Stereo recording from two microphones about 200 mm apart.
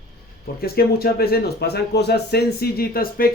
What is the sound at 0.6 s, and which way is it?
A man's voice, 50° left (ahead or behind).